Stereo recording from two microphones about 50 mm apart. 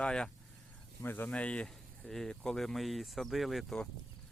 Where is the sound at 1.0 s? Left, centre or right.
Left.